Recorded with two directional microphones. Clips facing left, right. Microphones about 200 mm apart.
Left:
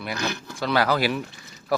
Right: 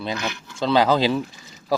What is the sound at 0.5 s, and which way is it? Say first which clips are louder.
Speech: right 5 dB; 20° right (ahead or behind).